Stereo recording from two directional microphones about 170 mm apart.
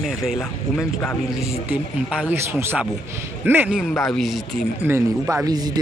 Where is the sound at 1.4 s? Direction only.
5° right (ahead or behind).